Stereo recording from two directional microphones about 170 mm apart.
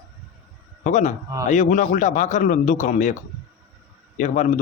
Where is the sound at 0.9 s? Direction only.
45° left (ahead or behind).